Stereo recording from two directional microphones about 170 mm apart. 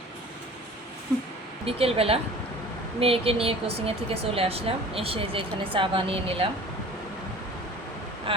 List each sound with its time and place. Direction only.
1.6 s a woman's voice: 35° right (ahead or behind)
8.3 s a woman's voice: 30° right (ahead or behind)